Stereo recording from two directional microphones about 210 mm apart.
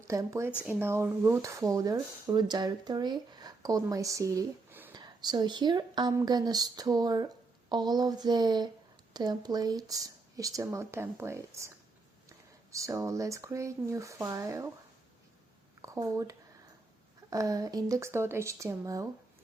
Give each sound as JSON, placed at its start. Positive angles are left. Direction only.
{"t": 0.1, "sound": "a woman's voice", "side_deg": -15}
{"t": 12.7, "sound": "speech", "side_deg": -15}
{"t": 15.8, "sound": "speech", "side_deg": -15}